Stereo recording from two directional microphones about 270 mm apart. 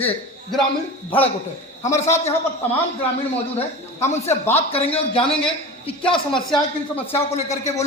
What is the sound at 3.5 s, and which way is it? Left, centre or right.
A man's voice, left.